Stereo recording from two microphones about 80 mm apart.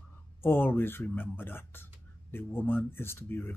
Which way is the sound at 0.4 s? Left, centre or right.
Left.